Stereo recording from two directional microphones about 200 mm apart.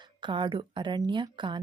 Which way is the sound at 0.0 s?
25° right (ahead or behind).